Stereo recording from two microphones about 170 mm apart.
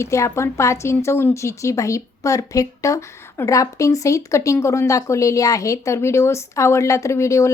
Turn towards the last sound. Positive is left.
turn(degrees=15)  # may be behind; listen again after turning